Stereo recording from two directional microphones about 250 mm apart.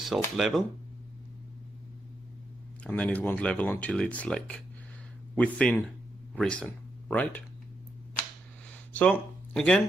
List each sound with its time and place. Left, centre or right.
0.0 s speech: centre
2.8 s speech: centre
8.6 s a sound: centre